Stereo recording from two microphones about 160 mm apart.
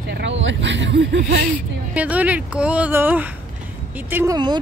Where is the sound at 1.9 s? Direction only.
10° right (ahead or behind).